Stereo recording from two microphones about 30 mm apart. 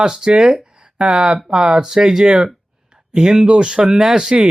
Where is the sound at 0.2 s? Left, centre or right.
Right.